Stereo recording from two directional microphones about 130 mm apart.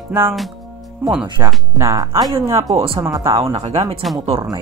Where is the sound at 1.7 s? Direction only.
25° right (ahead or behind).